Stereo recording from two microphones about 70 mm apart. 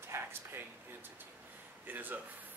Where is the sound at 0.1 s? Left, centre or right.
Right.